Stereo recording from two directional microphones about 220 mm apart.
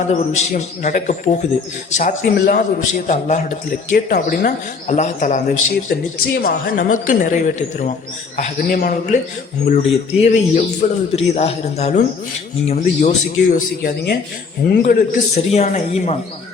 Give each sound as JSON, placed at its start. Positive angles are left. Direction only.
{"t": 0.1, "sound": "speech", "side_deg": 30}